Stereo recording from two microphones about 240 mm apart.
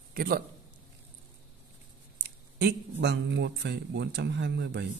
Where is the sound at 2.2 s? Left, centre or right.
Right.